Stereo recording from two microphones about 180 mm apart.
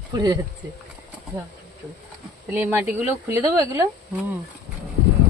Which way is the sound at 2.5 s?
10° right (ahead or behind).